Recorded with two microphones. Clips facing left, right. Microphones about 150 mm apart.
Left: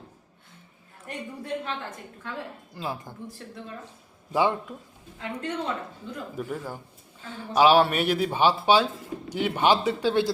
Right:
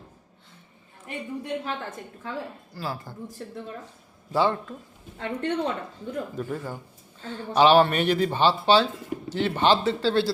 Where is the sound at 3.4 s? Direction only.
35° right (ahead or behind).